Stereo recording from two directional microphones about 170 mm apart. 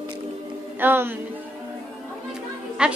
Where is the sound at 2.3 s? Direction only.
5° right (ahead or behind).